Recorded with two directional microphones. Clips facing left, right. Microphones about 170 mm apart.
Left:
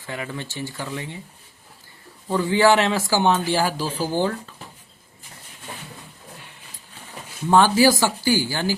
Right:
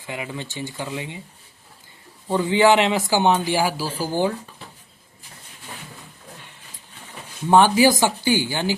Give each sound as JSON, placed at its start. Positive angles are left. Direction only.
{"t": 0.0, "sound": "speech", "side_deg": -15}
{"t": 2.3, "sound": "speech", "side_deg": -20}
{"t": 7.5, "sound": "speech", "side_deg": -20}